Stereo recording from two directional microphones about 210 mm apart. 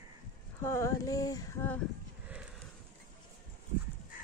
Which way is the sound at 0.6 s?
15° left (ahead or behind).